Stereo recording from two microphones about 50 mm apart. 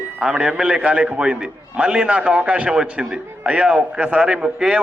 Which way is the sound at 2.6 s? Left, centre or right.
Centre.